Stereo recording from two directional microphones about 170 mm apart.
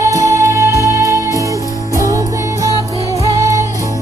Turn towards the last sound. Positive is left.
turn(degrees=-15)  # may be behind; listen again after turning